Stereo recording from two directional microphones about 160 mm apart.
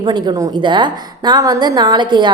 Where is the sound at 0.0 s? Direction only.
25° right (ahead or behind).